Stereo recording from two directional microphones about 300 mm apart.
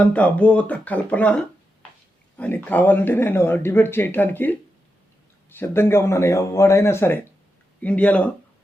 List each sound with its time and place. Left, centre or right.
0.0 s speech: centre
5.5 s speech: centre